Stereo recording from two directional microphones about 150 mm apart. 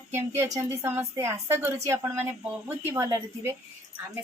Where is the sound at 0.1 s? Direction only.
20° right (ahead or behind).